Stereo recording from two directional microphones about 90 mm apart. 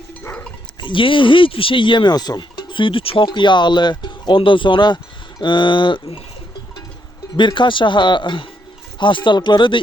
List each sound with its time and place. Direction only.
0.8 s speech: 65° left (ahead or behind); by 3.2 s 85° left
3.2 s speech: 60° left (ahead or behind); by 6.2 s 75° left (ahead or behind)
7.3 s speech: 60° left (ahead or behind)